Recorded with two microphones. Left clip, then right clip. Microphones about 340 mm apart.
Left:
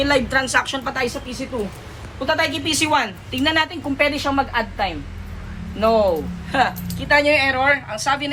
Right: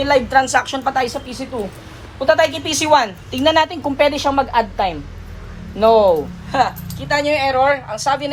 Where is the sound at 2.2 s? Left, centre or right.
Right.